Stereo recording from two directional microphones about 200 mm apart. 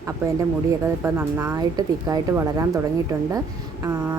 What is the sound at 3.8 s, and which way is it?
Speech, 15° right (ahead or behind).